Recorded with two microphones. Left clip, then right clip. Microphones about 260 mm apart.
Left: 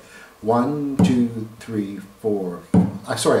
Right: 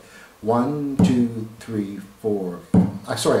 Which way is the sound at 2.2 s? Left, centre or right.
Left.